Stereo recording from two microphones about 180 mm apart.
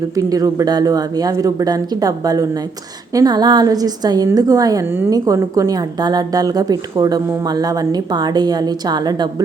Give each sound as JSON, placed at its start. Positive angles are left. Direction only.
{"t": 0.2, "sound": "a woman's voice", "side_deg": -20}